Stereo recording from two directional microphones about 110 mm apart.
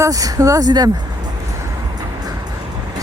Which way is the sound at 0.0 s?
30° right (ahead or behind).